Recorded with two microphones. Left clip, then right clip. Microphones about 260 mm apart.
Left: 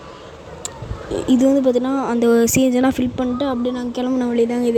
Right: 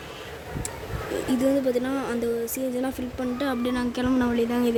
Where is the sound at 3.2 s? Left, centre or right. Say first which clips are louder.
Left 7 dB; centre.